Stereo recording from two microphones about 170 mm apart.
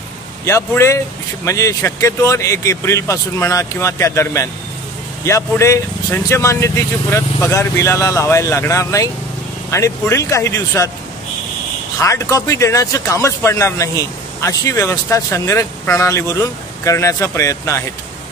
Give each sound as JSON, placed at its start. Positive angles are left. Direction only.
{"t": 0.5, "sound": "speech", "side_deg": 15}
{"t": 12.0, "sound": "speech", "side_deg": 15}